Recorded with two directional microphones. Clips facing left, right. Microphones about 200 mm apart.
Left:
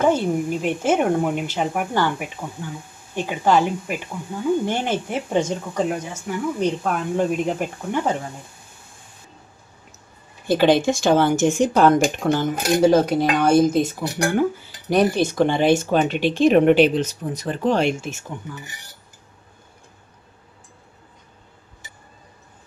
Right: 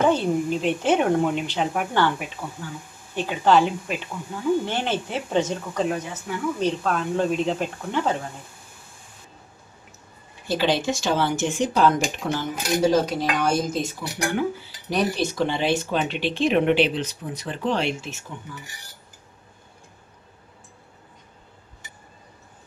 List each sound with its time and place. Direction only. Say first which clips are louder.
0.1 s speech: left 1 dB; 10° left (ahead or behind)
10.5 s speech: left 6 dB; 55° left (ahead or behind)